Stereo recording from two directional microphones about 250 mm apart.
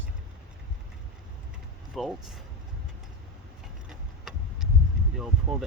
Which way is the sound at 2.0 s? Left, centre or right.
Centre.